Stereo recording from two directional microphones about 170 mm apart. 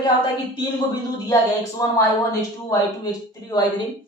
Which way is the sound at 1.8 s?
20° left (ahead or behind).